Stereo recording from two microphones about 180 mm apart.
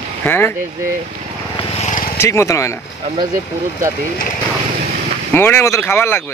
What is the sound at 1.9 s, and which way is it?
Vehicle, 50° left (ahead or behind).